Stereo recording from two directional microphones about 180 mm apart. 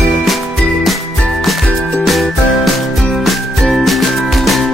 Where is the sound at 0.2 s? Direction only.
Centre (ahead or behind).